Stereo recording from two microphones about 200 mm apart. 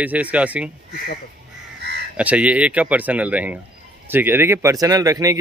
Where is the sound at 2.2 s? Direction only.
5° right (ahead or behind).